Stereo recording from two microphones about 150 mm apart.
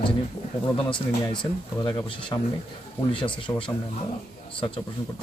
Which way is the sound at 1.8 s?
30° left (ahead or behind).